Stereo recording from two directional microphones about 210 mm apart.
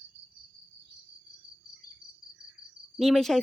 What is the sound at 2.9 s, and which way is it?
Speech, centre (ahead or behind).